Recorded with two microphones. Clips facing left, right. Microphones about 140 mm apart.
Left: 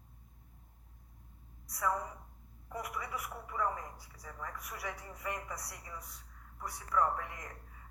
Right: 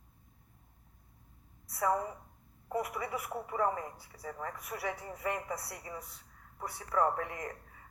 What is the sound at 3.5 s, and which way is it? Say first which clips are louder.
Speech: right 4 dB; 50° right (ahead or behind).